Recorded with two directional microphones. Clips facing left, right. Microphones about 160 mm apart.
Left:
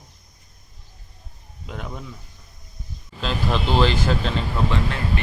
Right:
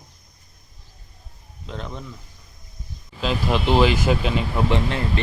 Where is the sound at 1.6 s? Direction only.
10° left (ahead or behind).